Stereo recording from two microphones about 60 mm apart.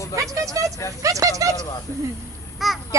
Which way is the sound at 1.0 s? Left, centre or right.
Right.